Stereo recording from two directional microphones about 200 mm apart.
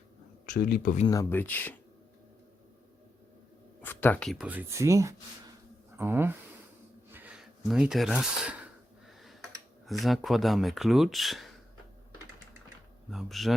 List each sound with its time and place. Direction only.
0.4 s speech: 45° left (ahead or behind)
1.0 s speech: 15° left (ahead or behind)
3.8 s speech: 10° left (ahead or behind); by 6.3 s 10° right (ahead or behind)
7.1 s a sound: 10° right (ahead or behind)
9.8 s speech: centre (ahead or behind)
13.1 s speech: centre (ahead or behind)